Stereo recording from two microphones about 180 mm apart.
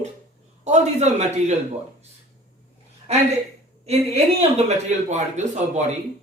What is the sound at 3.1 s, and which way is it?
Speech, 35° right (ahead or behind).